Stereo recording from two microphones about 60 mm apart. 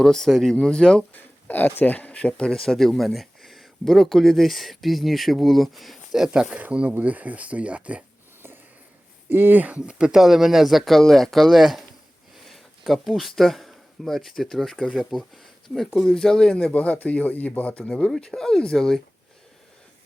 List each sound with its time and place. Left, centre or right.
0.0 s speech: centre
1.1 s speech: left
2.5 s speech: centre
6.5 s speech: right
9.3 s speech: right; by 11.9 s centre
12.9 s speech: centre
16.0 s speech: centre
16.7 s speech: left